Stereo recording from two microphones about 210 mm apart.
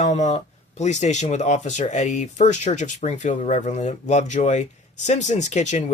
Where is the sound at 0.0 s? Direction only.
35° left (ahead or behind).